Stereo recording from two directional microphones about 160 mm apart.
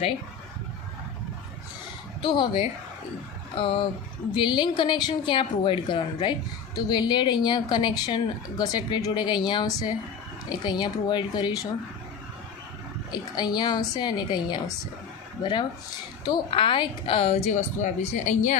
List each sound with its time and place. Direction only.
2.2 s a woman's voice: 30° left (ahead or behind)
13.1 s a woman's voice: 25° left (ahead or behind)
16.2 s a woman's voice: 30° left (ahead or behind); by 18.5 s 50° left (ahead or behind)